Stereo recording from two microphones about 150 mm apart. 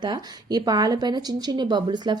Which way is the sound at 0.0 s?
25° right (ahead or behind).